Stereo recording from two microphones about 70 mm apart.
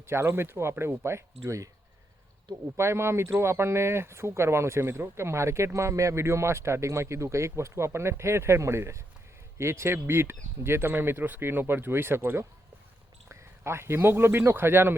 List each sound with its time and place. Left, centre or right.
0.0 s speech: right
2.7 s speech: right